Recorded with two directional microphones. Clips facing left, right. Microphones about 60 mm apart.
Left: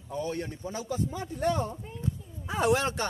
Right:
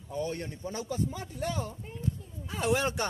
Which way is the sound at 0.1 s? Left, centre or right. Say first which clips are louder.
Left 1 dB; left.